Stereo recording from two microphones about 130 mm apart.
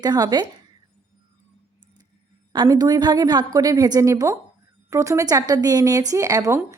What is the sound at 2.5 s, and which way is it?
A woman's voice, 30° right (ahead or behind).